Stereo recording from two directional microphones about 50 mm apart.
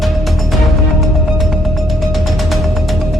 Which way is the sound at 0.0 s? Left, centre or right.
Centre.